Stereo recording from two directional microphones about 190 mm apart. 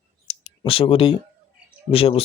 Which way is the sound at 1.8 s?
30° left (ahead or behind).